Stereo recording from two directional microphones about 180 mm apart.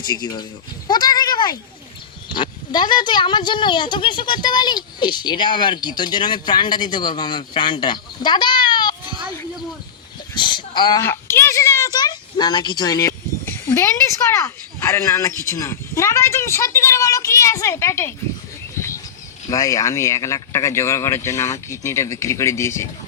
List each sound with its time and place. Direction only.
0.0 s speech: 25° left (ahead or behind)
10.3 s speech: 25° left (ahead or behind)
11.0 s a woman's voice: 15° left (ahead or behind)
19.5 s speech: 20° left (ahead or behind)